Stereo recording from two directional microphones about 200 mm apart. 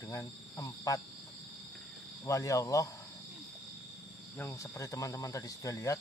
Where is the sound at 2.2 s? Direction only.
15° left (ahead or behind).